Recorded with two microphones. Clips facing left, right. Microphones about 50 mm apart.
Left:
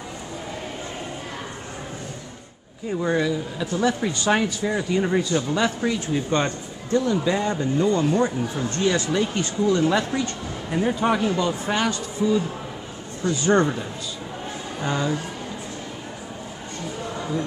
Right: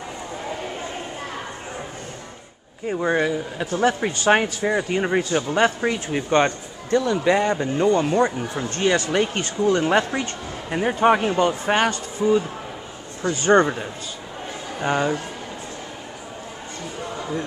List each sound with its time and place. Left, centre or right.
2.9 s speech: right
3.2 s speech: right
10.7 s speech: right
14.9 s speech: right